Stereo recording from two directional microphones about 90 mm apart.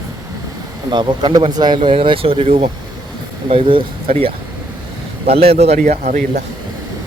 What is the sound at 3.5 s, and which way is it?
A man's voice, 80° right.